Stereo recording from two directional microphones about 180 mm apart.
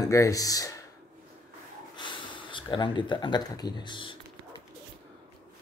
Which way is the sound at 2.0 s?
25° left (ahead or behind).